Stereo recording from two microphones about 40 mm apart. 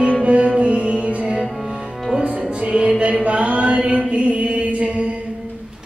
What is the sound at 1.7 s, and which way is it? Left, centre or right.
Music, centre.